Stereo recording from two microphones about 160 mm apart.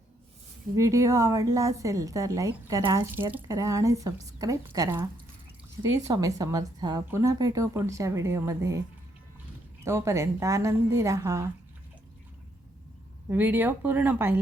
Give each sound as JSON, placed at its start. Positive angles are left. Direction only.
{"t": 0.8, "sound": "a woman's voice", "side_deg": -20}
{"t": 6.1, "sound": "a woman's voice", "side_deg": -20}
{"t": 9.8, "sound": "a woman's voice", "side_deg": -20}
{"t": 13.3, "sound": "speech", "side_deg": -10}